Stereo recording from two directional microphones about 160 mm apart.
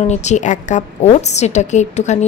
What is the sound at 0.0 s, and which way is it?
A woman's voice, 45° left (ahead or behind).